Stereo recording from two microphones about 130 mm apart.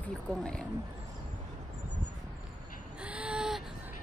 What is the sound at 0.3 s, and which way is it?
Speech, 5° left (ahead or behind).